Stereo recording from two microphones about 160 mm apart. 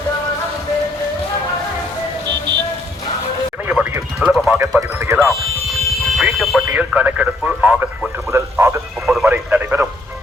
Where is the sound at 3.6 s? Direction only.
10° right (ahead or behind).